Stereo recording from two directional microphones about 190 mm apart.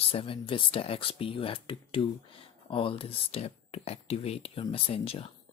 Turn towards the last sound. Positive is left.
turn(degrees=30)  # may be behind; listen again after turning